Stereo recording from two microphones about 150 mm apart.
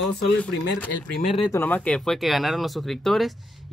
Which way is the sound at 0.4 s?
10° left (ahead or behind).